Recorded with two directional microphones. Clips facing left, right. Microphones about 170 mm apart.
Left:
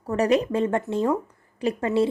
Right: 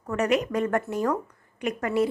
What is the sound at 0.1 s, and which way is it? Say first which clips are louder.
A woman's voice: left 3 dB; 30° left (ahead or behind).